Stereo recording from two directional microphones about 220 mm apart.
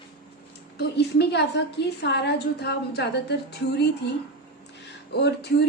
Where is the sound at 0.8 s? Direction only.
50° left (ahead or behind).